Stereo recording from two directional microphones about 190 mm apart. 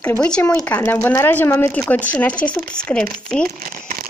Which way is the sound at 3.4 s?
50° right (ahead or behind).